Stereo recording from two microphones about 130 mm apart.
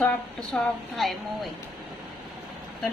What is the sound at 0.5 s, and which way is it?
Speech, centre (ahead or behind).